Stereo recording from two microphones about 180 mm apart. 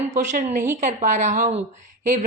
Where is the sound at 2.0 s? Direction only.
50° right (ahead or behind).